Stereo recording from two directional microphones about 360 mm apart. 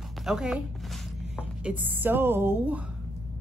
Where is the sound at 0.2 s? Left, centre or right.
Centre.